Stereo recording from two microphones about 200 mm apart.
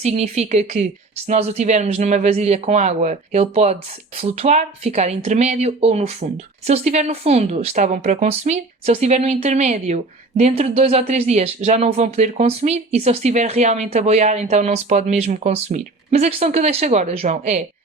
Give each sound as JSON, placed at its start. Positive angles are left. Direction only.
{"t": 0.0, "sound": "speech", "side_deg": -30}